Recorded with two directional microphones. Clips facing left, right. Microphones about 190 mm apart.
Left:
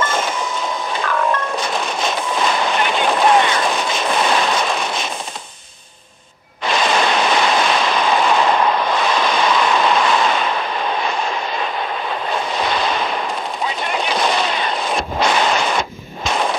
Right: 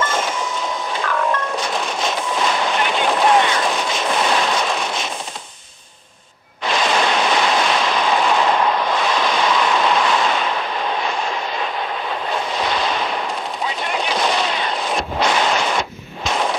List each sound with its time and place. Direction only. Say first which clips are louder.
0.0 s train: left 1 dB; 55° left (ahead or behind)
0.9 s a sound: left 1 dB; 55° left (ahead or behind)
6.7 s waves: left 1 dB; 55° left (ahead or behind)
12.5 s artillery fire: left 1 dB; 55° left (ahead or behind)
13.7 s gunshot: left 1 dB; 50° left (ahead or behind)
16.3 s a sound: left 1 dB; 55° left (ahead or behind)